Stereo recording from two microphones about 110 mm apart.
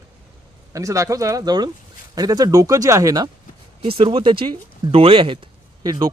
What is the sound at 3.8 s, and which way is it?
Speech, 60° right (ahead or behind).